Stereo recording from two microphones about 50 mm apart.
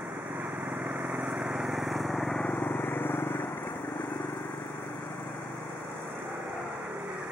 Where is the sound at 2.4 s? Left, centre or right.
Left.